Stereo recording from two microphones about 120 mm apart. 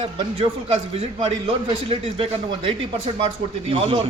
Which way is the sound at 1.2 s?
45° right (ahead or behind).